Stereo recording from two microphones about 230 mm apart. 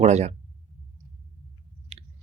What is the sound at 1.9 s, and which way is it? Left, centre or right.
Chewing, right.